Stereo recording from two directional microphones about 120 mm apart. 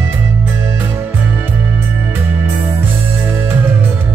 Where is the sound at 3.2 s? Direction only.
15° right (ahead or behind).